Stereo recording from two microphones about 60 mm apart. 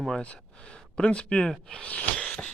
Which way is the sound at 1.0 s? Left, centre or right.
Centre.